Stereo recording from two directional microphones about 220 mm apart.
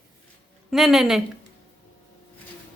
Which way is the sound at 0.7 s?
Centre (ahead or behind).